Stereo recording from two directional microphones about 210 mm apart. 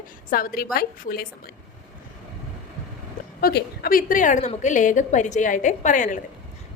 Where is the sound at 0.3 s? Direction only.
40° left (ahead or behind).